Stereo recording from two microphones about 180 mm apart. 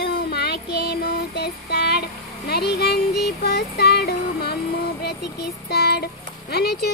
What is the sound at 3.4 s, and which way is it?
Music, 60° left (ahead or behind).